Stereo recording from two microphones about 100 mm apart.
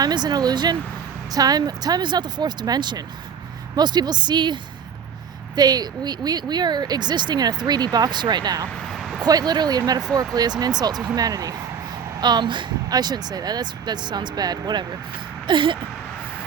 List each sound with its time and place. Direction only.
0.0 s speech: 45° right (ahead or behind)
8.9 s a sound: centre (ahead or behind)
9.2 s speech: 45° right (ahead or behind)
15.4 s vehicle: 55° right (ahead or behind)